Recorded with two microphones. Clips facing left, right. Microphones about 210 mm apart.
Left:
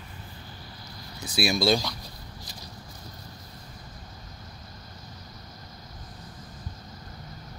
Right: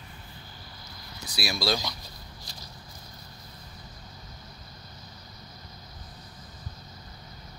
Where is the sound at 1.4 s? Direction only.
25° left (ahead or behind).